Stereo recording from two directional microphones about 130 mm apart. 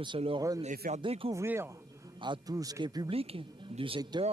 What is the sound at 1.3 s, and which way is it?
Speech, 20° right (ahead or behind).